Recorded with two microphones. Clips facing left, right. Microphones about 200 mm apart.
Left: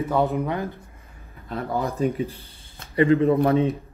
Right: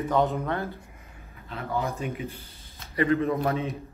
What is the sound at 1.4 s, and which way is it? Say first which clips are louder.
Speech: left 4 dB; 50° left (ahead or behind).